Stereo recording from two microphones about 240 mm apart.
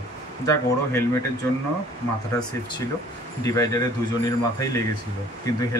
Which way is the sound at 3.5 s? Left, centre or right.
Centre.